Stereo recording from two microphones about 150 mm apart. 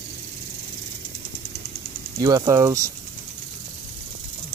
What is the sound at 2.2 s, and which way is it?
Speech, 25° right (ahead or behind).